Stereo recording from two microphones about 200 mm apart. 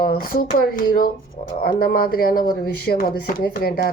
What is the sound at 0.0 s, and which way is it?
Speech, 50° left (ahead or behind).